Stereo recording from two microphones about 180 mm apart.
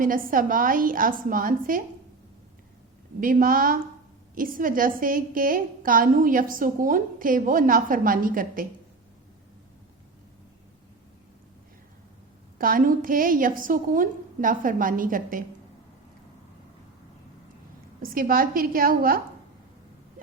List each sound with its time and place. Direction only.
0.0 s a woman's voice: 50° right (ahead or behind)
3.2 s a woman's voice: 50° right (ahead or behind)
12.5 s a woman's voice: 50° right (ahead or behind)
18.0 s a woman's voice: 50° right (ahead or behind)